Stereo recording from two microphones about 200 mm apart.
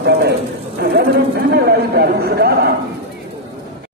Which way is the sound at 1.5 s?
50° right (ahead or behind).